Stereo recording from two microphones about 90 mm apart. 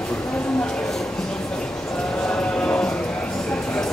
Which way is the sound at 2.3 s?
10° left (ahead or behind).